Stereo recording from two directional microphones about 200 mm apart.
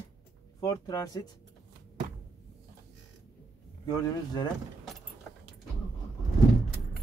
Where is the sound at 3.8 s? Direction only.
20° left (ahead or behind).